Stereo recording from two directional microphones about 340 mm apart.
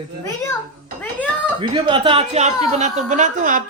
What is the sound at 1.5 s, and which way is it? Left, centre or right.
A woman's voice, centre.